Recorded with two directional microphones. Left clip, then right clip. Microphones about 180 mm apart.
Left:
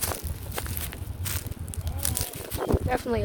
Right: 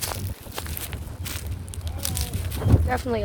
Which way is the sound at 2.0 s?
60° left (ahead or behind).